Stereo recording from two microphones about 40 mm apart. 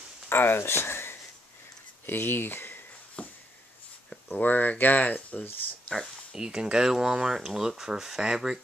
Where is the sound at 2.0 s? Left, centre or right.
Left.